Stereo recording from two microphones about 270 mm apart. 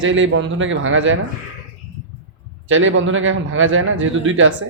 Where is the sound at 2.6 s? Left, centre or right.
Right.